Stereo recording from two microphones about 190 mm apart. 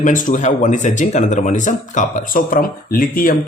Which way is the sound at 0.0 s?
45° left (ahead or behind).